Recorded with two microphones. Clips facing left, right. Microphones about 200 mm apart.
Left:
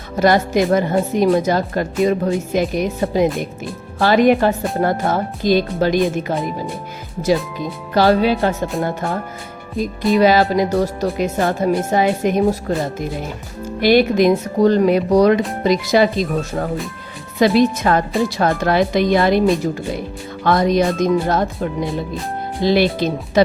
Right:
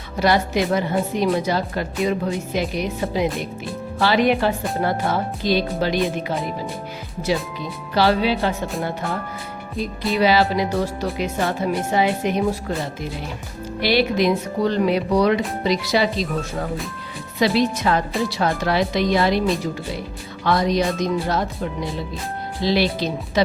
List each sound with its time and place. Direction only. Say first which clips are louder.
0.2 s a woman's voice: left 4 dB; 45° left (ahead or behind)
7.3 s a woman's voice: left 5 dB; 45° left (ahead or behind)
10.2 s a woman's voice: left 4 dB; 45° left (ahead or behind)
20.4 s a woman's voice: left 4 dB; 50° left (ahead or behind)